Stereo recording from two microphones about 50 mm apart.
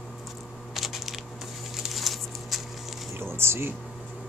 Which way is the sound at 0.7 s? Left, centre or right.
Centre.